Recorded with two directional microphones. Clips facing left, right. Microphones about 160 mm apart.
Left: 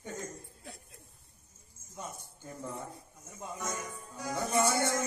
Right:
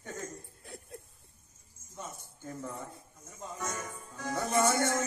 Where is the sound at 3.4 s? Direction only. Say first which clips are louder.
Even; 10° left (ahead or behind).